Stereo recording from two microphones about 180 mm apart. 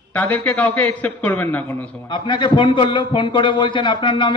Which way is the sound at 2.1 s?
25° left (ahead or behind).